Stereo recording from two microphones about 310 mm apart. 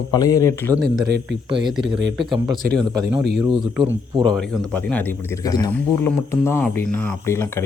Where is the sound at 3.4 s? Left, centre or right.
Centre.